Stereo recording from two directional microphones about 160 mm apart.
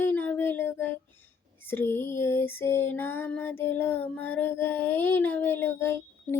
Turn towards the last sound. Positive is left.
turn(degrees=15)  # may be behind; listen again after turning